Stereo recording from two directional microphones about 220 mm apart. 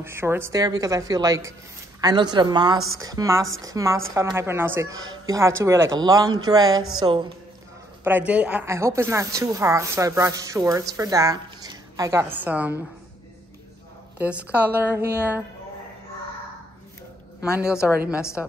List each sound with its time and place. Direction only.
0.0 s a woman's voice: 10° right (ahead or behind)
8.0 s a woman's voice: 5° right (ahead or behind)
14.1 s a woman's voice: 5° right (ahead or behind)
17.4 s speech: 5° right (ahead or behind)